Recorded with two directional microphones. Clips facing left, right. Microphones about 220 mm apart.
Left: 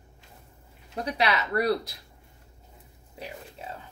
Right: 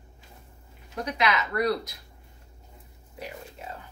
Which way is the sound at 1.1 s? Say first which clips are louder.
Even; 35° left (ahead or behind).